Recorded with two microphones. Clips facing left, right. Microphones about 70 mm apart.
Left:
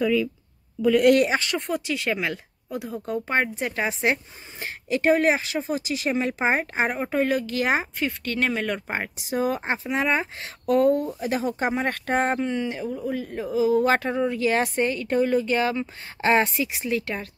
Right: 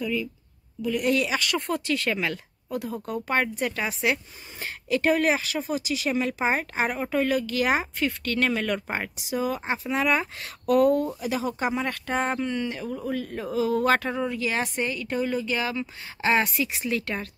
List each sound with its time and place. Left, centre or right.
1.2 s speech: left
1.7 s speech: centre
9.3 s speech: left
9.9 s speech: left
11.1 s speech: left
12.4 s speech: centre
14.3 s speech: left